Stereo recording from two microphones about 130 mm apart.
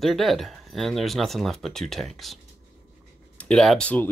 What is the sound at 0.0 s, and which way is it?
Speech, centre (ahead or behind).